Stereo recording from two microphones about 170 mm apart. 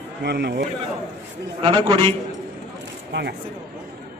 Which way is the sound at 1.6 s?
30° right (ahead or behind).